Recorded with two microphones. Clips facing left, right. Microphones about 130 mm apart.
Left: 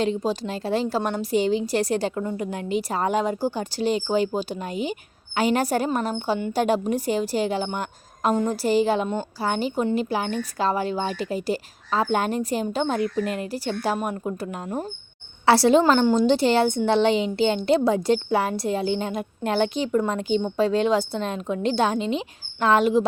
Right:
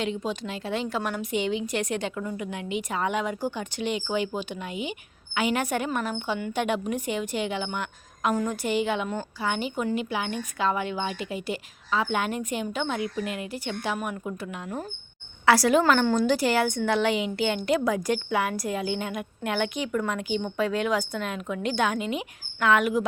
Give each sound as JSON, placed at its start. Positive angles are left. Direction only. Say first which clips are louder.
{"t": 0.0, "sound": "a woman's voice", "louder": "left 5 dB", "side_deg": 35}
{"t": 15.4, "sound": "a woman's voice", "louder": "left 3 dB", "side_deg": 30}